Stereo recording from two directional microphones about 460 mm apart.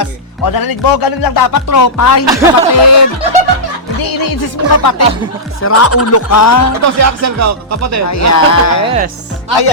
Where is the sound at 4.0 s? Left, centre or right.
Left.